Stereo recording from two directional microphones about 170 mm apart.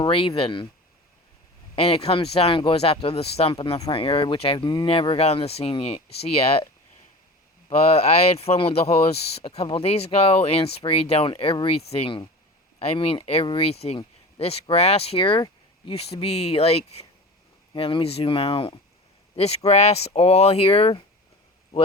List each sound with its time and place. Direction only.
0.0 s speech: 30° left (ahead or behind)
1.7 s speech: 35° left (ahead or behind)
7.8 s speech: 35° left (ahead or behind)